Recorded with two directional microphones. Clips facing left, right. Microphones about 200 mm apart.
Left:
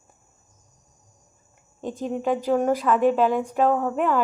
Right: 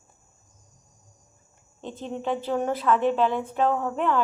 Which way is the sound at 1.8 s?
40° left (ahead or behind).